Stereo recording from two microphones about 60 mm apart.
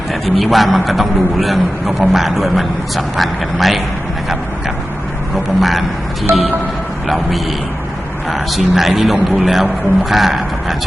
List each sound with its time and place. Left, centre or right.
0.1 s a man's voice: centre
5.3 s speech: centre
6.3 s music: right
7.1 s a man's voice: centre